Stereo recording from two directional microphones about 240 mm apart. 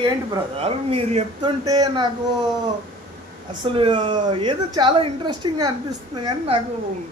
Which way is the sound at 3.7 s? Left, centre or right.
Centre.